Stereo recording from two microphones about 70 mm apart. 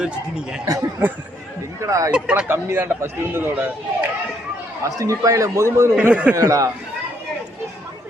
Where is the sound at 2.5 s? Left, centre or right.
Right.